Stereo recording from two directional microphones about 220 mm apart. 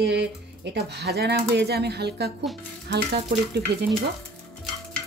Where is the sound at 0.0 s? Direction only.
50° right (ahead or behind).